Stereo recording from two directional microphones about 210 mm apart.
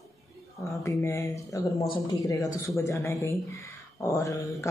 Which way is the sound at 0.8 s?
15° left (ahead or behind).